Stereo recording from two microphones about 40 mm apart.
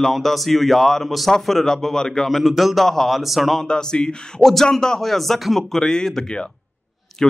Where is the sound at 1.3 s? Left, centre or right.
Centre.